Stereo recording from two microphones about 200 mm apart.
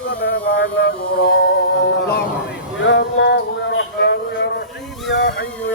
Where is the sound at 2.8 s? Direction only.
65° left (ahead or behind).